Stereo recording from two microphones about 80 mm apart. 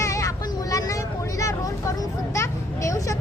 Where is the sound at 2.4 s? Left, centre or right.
Left.